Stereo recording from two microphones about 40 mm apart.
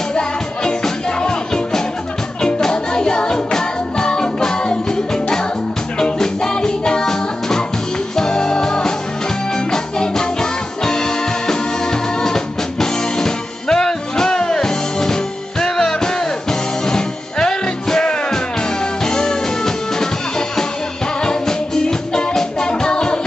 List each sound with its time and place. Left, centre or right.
1.2 s music: centre